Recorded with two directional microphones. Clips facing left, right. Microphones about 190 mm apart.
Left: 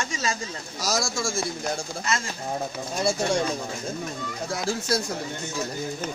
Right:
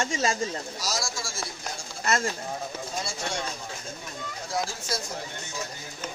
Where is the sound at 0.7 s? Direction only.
45° left (ahead or behind).